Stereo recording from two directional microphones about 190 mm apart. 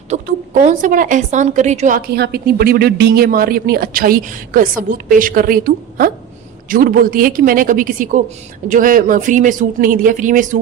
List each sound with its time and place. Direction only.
0.1 s a woman's voice: 40° right (ahead or behind)
2.0 s speech: 55° right (ahead or behind)